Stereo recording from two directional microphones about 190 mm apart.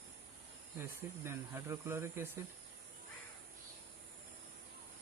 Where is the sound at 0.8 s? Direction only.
15° right (ahead or behind).